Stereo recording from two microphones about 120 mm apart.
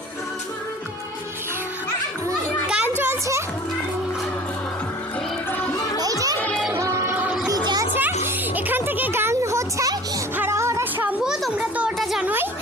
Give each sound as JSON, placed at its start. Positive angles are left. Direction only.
{"t": 2.6, "sound": "a sound", "side_deg": -10}
{"t": 3.0, "sound": "music", "side_deg": -20}
{"t": 5.5, "sound": "music", "side_deg": 15}
{"t": 6.0, "sound": "music", "side_deg": -30}
{"t": 6.4, "sound": "music", "side_deg": 5}
{"t": 6.7, "sound": "music", "side_deg": -25}
{"t": 7.4, "sound": "music", "side_deg": -35}
{"t": 8.2, "sound": "music", "side_deg": -15}
{"t": 11.2, "sound": "a sound", "side_deg": -5}